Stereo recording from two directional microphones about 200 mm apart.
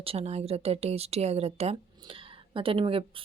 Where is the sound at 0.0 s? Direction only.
30° right (ahead or behind).